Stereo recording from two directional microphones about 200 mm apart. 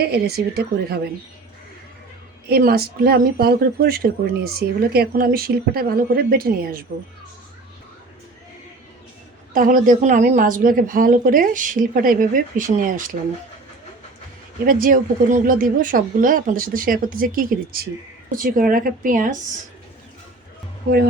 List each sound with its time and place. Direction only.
0.0 s speech: 55° right (ahead or behind)
2.5 s speech: 50° right (ahead or behind)
9.5 s speech: 40° right (ahead or behind)
14.6 s speech: 45° right (ahead or behind)